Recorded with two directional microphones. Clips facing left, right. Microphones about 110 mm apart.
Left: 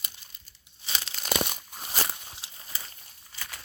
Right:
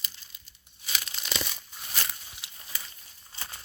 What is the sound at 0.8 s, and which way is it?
Tearing, 30° left (ahead or behind).